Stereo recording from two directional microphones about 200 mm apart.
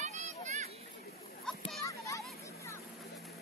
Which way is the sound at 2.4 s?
15° left (ahead or behind).